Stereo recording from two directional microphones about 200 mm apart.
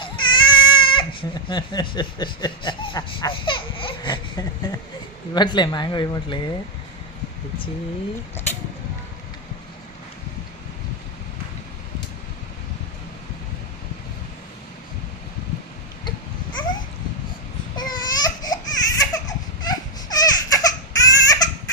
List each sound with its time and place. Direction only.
0.0 s goat: 25° left (ahead or behind)
5.3 s speech: 20° left (ahead or behind)
16.0 s goat: 20° left (ahead or behind)
17.7 s baby cry: 20° left (ahead or behind)
19.6 s crying: 20° left (ahead or behind)